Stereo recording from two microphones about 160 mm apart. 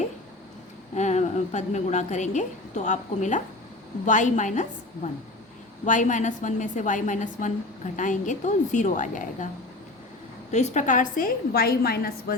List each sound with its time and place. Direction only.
0.9 s a woman's voice: 45° left (ahead or behind)
5.8 s a woman's voice: 50° left (ahead or behind)
10.5 s a woman's voice: 45° left (ahead or behind); by 12.4 s 70° left (ahead or behind)